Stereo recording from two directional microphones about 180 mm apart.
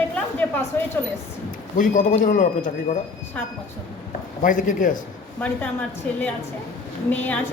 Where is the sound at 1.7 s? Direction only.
45° left (ahead or behind).